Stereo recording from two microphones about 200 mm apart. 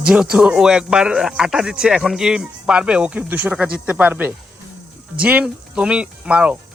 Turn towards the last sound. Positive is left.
turn(degrees=-5)  # may be behind; listen again after turning